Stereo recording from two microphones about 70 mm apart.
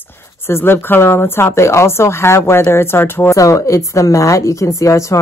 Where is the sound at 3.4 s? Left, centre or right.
Left.